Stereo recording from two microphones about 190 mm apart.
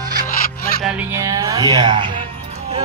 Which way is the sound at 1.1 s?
20° right (ahead or behind).